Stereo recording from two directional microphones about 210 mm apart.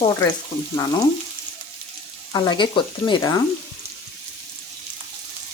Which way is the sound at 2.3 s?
20° left (ahead or behind).